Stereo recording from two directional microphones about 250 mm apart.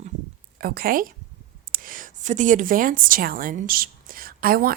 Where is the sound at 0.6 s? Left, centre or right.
Right.